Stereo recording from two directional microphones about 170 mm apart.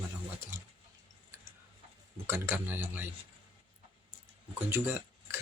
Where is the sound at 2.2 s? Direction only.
15° right (ahead or behind).